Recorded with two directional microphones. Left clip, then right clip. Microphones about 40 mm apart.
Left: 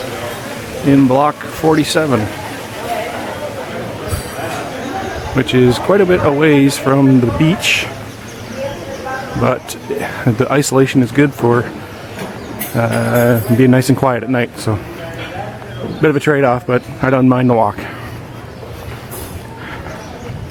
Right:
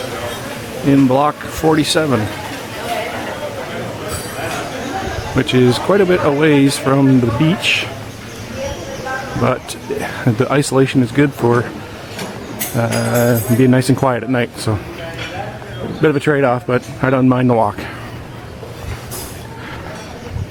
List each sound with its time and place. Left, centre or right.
0.1 s a sound: centre
0.4 s speech: centre
2.2 s a sound: centre
4.4 s a man's voice: centre
8.6 s a sound: centre
9.4 s speech: centre
12.7 s music: centre
13.1 s speech: centre
16.0 s speech: centre